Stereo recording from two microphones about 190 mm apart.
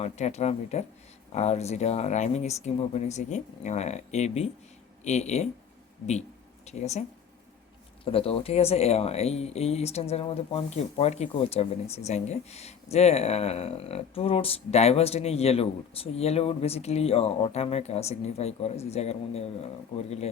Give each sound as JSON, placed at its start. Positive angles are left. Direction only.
{"t": 0.0, "sound": "speech", "side_deg": 35}
{"t": 6.7, "sound": "speech", "side_deg": 35}
{"t": 8.0, "sound": "speech", "side_deg": 30}